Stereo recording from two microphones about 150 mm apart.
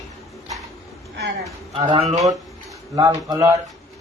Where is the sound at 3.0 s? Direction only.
25° right (ahead or behind).